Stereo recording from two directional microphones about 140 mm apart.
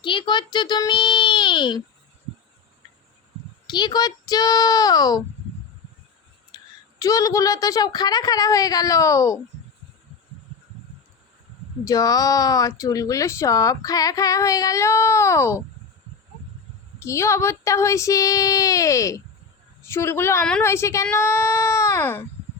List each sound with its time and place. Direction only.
0.0 s speech: 35° left (ahead or behind)
3.7 s speech: 30° left (ahead or behind)
6.5 s a sound: 30° left (ahead or behind)
7.0 s speech: 25° left (ahead or behind)
11.9 s speech: 25° left (ahead or behind)
17.0 s a woman's voice: 20° left (ahead or behind)
21.2 s a sound: 15° left (ahead or behind)